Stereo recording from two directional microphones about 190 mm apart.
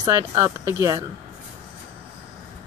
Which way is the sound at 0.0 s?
20° right (ahead or behind).